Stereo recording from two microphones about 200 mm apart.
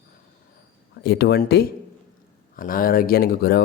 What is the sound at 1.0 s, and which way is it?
Speech, 55° left (ahead or behind).